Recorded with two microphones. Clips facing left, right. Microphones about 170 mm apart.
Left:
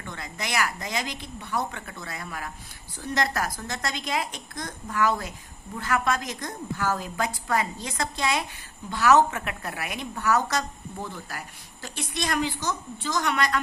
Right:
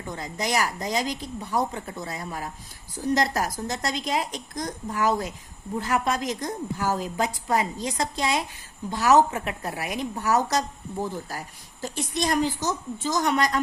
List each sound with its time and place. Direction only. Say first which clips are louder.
0.0 s a woman's voice: right 5 dB; 35° right (ahead or behind)